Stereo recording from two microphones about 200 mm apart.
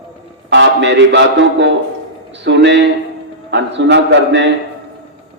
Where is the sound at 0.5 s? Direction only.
60° right (ahead or behind).